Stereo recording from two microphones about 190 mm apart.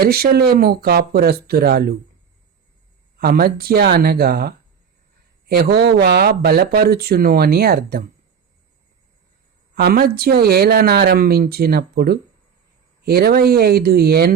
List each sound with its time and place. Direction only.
0.0 s speech: 55° right (ahead or behind)
3.2 s speech: 50° right (ahead or behind)
9.7 s speech: 55° right (ahead or behind)